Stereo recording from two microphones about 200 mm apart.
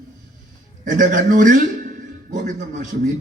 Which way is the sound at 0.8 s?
40° right (ahead or behind).